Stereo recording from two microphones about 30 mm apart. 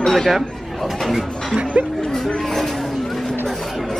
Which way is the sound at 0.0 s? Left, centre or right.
Centre.